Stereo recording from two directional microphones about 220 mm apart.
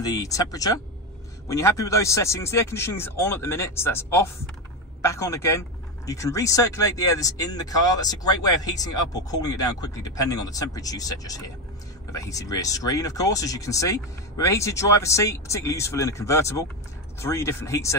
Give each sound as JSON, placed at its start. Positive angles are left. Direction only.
{"t": 0.0, "sound": "speech", "side_deg": 15}